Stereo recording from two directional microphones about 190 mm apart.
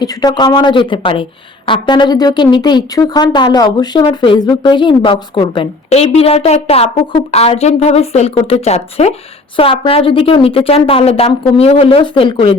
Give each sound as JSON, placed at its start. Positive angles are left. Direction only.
{"t": 0.0, "sound": "speech", "side_deg": 20}